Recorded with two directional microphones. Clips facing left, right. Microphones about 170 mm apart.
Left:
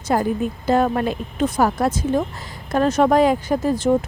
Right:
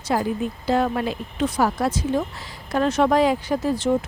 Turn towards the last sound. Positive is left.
turn(degrees=45)  # may be behind; listen again after turning